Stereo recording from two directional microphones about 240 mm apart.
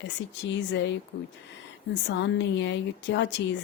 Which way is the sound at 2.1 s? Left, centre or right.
Left.